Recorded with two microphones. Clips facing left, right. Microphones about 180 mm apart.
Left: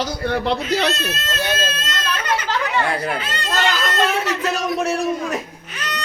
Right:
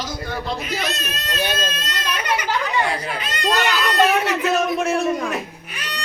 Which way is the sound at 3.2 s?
15° right (ahead or behind).